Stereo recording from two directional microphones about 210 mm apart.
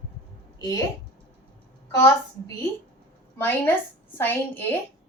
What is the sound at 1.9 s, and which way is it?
Speech, 15° left (ahead or behind).